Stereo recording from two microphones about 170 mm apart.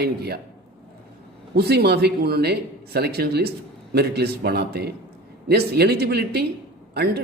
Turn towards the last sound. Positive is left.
turn(degrees=-70)  # may be behind; listen again after turning